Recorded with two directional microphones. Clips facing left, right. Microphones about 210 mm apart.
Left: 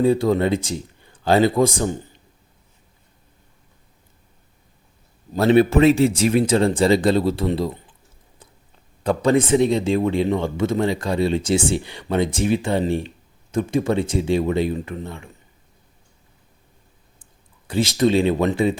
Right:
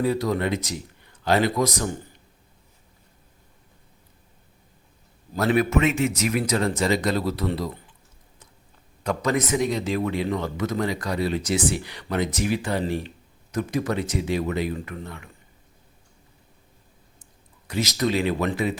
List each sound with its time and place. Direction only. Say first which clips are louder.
0.0 s speech: left 6 dB; 30° left (ahead or behind)
5.3 s speech: left 6 dB; 25° left (ahead or behind)
9.0 s speech: left 6 dB; 30° left (ahead or behind)
17.7 s speech: left 6 dB; 30° left (ahead or behind)